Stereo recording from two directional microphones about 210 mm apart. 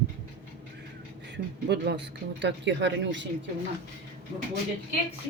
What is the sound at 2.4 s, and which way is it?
Speech, 55° right (ahead or behind).